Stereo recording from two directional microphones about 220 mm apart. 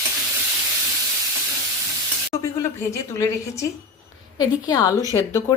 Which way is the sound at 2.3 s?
15° left (ahead or behind).